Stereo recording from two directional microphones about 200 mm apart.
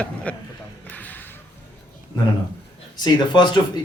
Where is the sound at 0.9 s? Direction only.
10° left (ahead or behind).